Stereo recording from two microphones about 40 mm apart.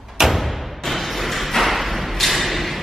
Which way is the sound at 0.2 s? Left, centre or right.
Centre.